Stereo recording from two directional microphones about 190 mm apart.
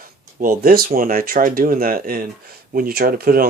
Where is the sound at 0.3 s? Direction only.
45° right (ahead or behind).